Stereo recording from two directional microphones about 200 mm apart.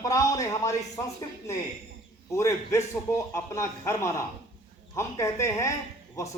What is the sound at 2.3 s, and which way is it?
A man's voice, 15° left (ahead or behind).